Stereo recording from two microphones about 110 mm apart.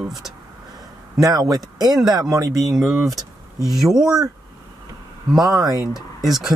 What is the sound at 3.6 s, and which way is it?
Speech, 5° right (ahead or behind).